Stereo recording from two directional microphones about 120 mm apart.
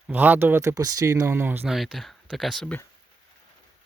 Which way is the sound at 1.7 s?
Centre (ahead or behind).